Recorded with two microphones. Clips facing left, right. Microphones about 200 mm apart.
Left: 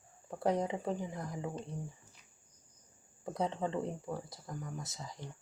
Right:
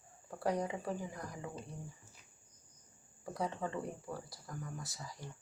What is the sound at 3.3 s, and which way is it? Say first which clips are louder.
Speech: left 4 dB; 20° left (ahead or behind).